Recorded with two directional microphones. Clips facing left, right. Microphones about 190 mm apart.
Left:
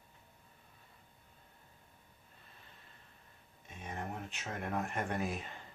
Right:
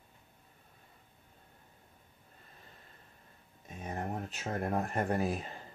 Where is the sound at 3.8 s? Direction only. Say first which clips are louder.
Right 5 dB; 40° right (ahead or behind).